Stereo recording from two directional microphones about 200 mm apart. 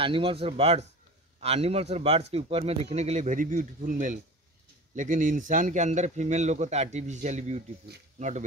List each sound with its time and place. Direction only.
0.0 s speech: 25° right (ahead or behind)